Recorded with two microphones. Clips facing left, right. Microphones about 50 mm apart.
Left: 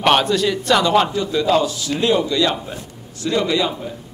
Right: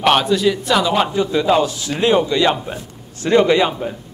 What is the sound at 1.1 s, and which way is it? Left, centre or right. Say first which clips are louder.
Speech: right 2 dB; right.